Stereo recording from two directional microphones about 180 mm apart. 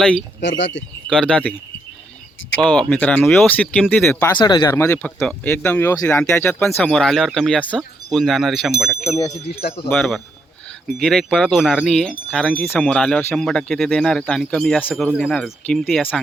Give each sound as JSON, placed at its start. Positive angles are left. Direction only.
{"t": 0.0, "sound": "speech", "side_deg": 5}
{"t": 0.4, "sound": "speech", "side_deg": 90}
{"t": 1.1, "sound": "speech", "side_deg": 5}
{"t": 2.6, "sound": "speech", "side_deg": 5}
{"t": 4.4, "sound": "speech", "side_deg": 25}